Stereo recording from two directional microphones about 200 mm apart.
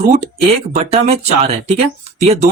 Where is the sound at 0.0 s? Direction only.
35° right (ahead or behind).